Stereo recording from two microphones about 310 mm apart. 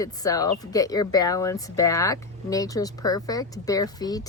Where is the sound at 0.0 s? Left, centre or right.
Centre.